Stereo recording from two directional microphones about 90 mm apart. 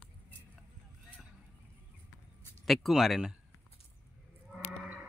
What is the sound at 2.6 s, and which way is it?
Speech, centre (ahead or behind).